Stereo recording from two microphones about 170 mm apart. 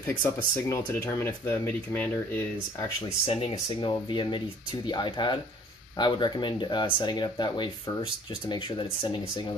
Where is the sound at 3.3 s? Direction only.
35° left (ahead or behind).